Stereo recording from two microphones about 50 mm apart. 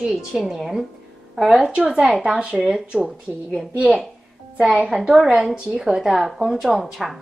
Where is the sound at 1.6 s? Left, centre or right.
Right.